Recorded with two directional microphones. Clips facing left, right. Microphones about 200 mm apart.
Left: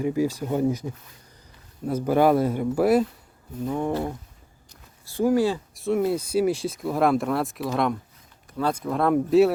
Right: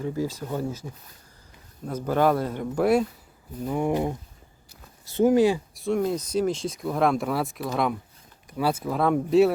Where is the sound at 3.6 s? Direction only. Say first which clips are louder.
Right 1 dB; 10° right (ahead or behind).